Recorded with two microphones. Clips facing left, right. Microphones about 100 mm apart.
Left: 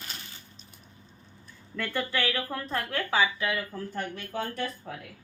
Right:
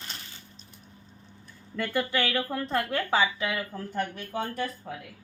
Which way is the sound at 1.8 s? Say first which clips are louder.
Right 2 dB; 15° right (ahead or behind).